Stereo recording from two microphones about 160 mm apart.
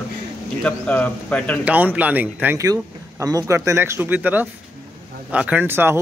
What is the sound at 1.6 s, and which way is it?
Speech, 10° right (ahead or behind).